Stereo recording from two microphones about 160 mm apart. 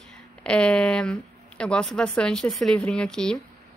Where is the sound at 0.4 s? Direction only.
5° left (ahead or behind).